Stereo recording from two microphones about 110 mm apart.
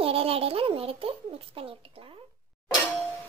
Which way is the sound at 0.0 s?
60° right (ahead or behind).